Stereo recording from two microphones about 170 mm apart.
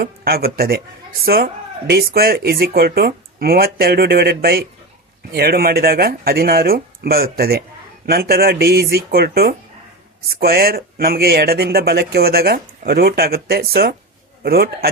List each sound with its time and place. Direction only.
0.0 s speech: 65° right (ahead or behind)